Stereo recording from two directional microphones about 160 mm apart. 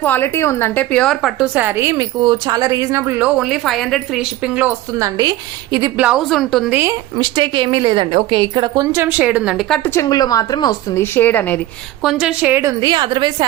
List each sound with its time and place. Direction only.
0.0 s speech: 15° left (ahead or behind)
1.5 s a woman's voice: 15° right (ahead or behind)
4.9 s a woman's voice: 20° right (ahead or behind)
6.0 s a woman's voice: 5° right (ahead or behind)
7.2 s a woman's voice: 30° right (ahead or behind); by 9.9 s 5° left (ahead or behind)
9.9 s speech: 20° left (ahead or behind)
12.0 s a woman's voice: 5° right (ahead or behind)
12.8 s a woman's voice: 30° right (ahead or behind)